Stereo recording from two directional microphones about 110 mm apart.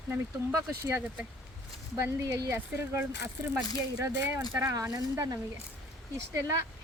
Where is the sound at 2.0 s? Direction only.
30° right (ahead or behind).